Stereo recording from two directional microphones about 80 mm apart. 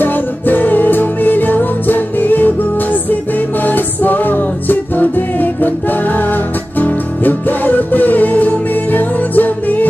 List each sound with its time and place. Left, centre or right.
0.0 s music: left